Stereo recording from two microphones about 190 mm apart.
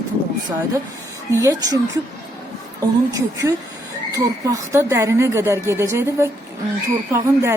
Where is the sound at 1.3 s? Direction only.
15° right (ahead or behind).